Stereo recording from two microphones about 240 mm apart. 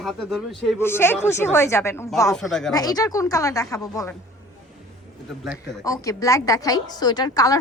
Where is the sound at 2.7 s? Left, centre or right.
Centre.